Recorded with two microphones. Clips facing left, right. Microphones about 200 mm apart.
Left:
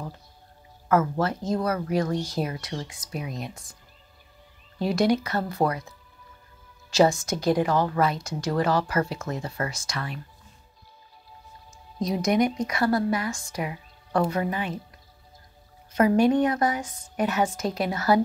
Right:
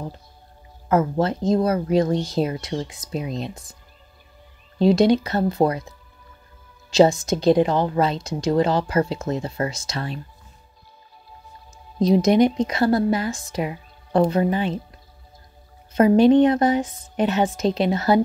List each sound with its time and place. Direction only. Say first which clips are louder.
0.8 s speech: right 3 dB; 20° right (ahead or behind)
4.7 s speech: right 6 dB; 25° right (ahead or behind)
12.0 s speech: right 7 dB; 25° right (ahead or behind)
15.9 s speech: right 6 dB; 25° right (ahead or behind)